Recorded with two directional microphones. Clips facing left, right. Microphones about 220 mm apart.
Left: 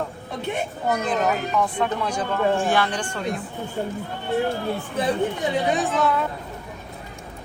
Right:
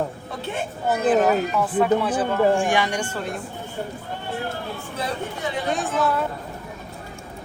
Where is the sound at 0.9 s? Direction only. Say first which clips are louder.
Right 5 dB; 5° right (ahead or behind).